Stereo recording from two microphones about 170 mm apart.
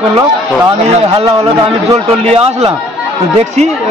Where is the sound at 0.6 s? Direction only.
35° right (ahead or behind).